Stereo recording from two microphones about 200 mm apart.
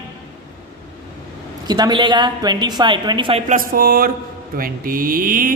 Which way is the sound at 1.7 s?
20° right (ahead or behind).